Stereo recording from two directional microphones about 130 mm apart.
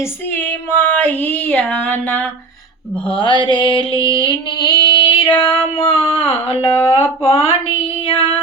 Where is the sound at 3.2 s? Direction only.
40° left (ahead or behind).